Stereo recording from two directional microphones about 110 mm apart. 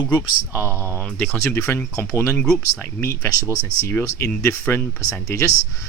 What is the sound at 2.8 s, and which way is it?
Speech, 25° left (ahead or behind).